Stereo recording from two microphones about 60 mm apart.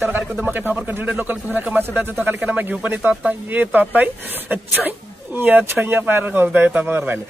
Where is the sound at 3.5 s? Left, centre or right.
Right.